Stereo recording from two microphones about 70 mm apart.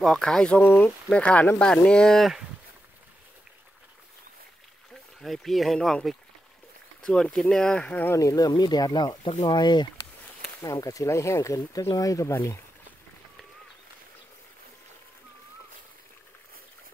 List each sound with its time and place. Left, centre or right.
0.0 s speech: centre
0.6 s speech: left
1.1 s speech: centre
5.2 s speech: centre
7.9 s speech: left
8.2 s speech: left
10.6 s speech: left